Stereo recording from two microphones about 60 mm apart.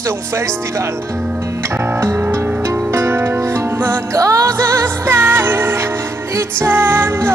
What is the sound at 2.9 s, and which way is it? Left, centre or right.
Music, right.